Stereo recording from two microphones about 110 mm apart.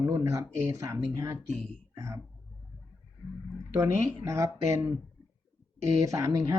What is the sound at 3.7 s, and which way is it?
Speech, 25° right (ahead or behind).